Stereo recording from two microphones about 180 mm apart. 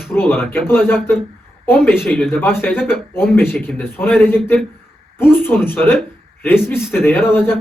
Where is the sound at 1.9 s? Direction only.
Centre (ahead or behind).